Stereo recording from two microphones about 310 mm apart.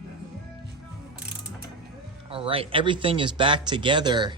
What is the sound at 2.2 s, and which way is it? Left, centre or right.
Speech, centre.